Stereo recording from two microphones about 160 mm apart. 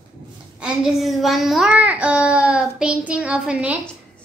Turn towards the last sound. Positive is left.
turn(degrees=-5)  # may be behind; listen again after turning